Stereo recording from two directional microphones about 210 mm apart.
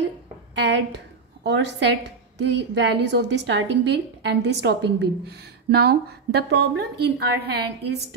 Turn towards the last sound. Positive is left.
turn(degrees=-50)  # may be behind; listen again after turning